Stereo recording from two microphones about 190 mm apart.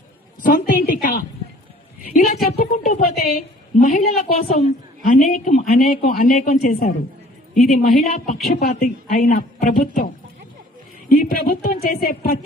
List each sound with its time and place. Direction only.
0.4 s a woman's voice: 50° left (ahead or behind)
2.1 s a sound: 40° left (ahead or behind)
2.6 s a woman's voice: 40° left (ahead or behind)
11.1 s a woman's voice: 45° left (ahead or behind)